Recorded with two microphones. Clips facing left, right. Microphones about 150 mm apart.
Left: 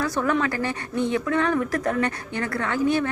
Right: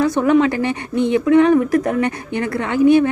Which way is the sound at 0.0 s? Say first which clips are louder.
Right 9 dB; 20° right (ahead or behind).